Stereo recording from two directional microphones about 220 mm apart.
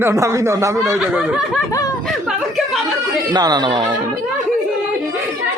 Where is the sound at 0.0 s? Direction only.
10° right (ahead or behind).